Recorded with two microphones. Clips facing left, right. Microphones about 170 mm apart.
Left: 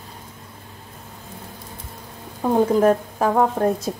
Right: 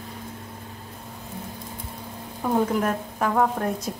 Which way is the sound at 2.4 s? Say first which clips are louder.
Left 7 dB; 35° left (ahead or behind).